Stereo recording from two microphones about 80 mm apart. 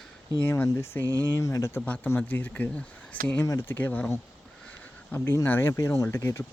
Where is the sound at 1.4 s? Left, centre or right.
Left.